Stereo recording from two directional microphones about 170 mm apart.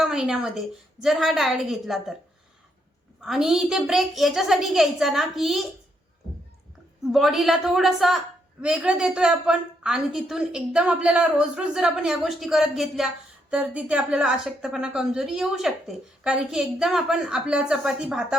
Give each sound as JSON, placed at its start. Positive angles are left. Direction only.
{"t": 0.0, "sound": "a woman's voice", "side_deg": -5}
{"t": 3.2, "sound": "a woman's voice", "side_deg": 0}
{"t": 7.0, "sound": "a woman's voice", "side_deg": 0}